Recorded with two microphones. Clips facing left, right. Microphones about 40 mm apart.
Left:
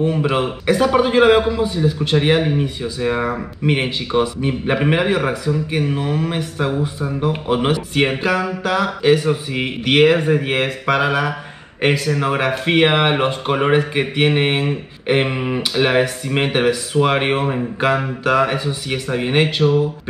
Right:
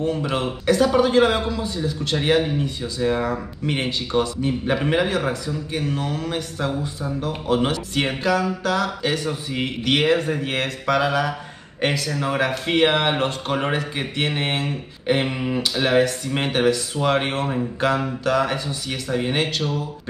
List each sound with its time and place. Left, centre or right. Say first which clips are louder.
0.0 s speech: left 5 dB; left